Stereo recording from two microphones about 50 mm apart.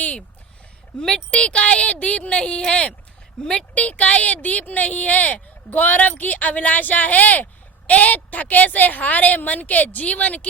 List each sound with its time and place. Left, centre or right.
1.3 s speech: left
3.8 s speech: left